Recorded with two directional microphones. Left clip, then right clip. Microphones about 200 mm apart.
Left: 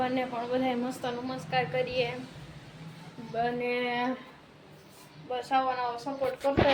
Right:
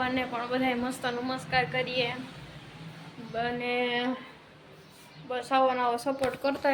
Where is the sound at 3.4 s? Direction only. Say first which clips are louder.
Even; centre (ahead or behind).